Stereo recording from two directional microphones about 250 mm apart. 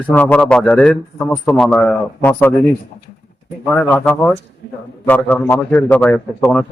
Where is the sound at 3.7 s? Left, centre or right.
Centre.